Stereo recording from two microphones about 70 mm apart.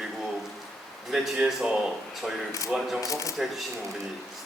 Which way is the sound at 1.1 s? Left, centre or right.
Centre.